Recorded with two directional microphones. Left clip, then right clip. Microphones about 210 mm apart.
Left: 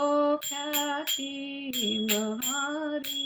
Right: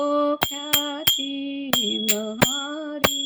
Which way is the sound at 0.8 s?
50° right (ahead or behind).